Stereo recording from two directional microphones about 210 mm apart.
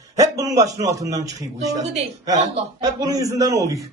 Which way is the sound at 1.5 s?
30° right (ahead or behind).